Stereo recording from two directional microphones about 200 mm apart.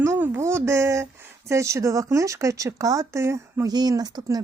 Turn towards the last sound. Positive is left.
turn(degrees=-20)  # may be behind; listen again after turning